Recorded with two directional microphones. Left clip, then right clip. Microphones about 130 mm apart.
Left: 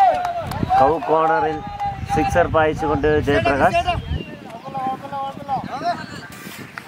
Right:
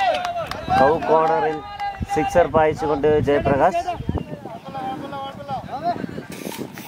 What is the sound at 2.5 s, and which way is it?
Speech, 10° right (ahead or behind).